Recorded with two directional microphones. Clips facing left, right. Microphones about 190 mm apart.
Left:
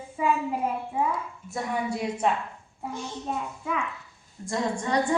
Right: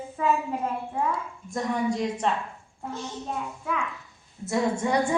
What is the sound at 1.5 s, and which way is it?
A woman's voice, 5° left (ahead or behind).